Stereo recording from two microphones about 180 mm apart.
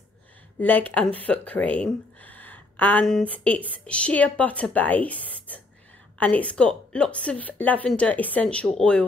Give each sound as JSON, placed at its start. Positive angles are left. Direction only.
{"t": 0.6, "sound": "speech", "side_deg": 10}